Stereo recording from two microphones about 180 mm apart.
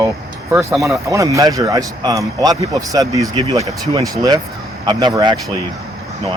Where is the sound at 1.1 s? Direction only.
20° right (ahead or behind).